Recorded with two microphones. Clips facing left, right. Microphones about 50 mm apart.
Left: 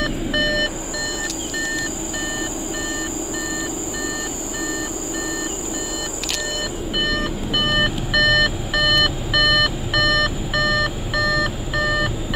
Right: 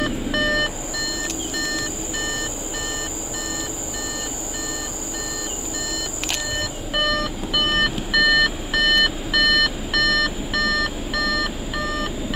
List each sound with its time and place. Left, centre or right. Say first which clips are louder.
7.5 s alarm clock: even; centre
10.6 s beep: left 2 dB; centre